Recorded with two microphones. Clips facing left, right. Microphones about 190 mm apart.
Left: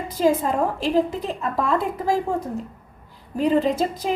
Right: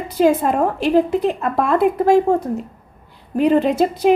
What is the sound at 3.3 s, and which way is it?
Speech, 65° right (ahead or behind).